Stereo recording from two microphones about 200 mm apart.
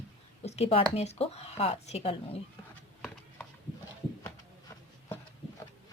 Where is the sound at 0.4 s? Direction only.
30° left (ahead or behind).